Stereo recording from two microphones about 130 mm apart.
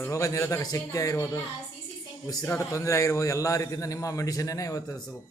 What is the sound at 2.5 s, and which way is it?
A man's voice, 25° left (ahead or behind).